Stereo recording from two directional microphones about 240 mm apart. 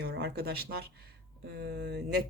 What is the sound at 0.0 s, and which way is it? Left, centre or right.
Speech, right.